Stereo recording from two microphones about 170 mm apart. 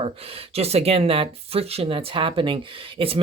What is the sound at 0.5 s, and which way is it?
Speech, 35° right (ahead or behind).